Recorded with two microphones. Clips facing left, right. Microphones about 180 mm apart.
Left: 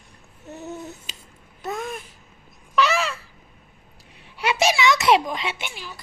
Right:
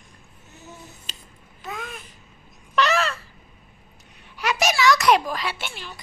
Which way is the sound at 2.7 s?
10° left (ahead or behind).